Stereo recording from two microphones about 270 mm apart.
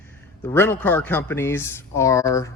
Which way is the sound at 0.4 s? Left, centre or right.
Centre.